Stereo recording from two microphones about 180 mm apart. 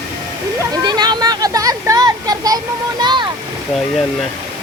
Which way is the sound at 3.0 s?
25° right (ahead or behind).